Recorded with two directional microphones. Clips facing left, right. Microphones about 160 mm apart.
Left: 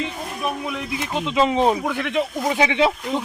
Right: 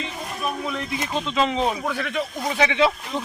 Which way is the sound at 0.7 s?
10° left (ahead or behind).